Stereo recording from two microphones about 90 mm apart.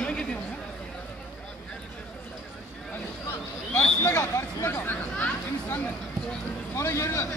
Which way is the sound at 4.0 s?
30° left (ahead or behind).